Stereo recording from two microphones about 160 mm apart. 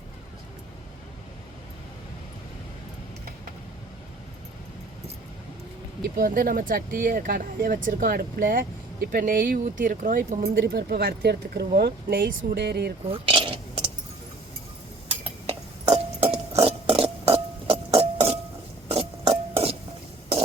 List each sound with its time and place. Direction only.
6.1 s speech: 60° right (ahead or behind); by 12.9 s 90° right
13.1 s coin: 35° right (ahead or behind)
15.2 s a sound: 35° right (ahead or behind)
18.9 s music: 40° right (ahead or behind)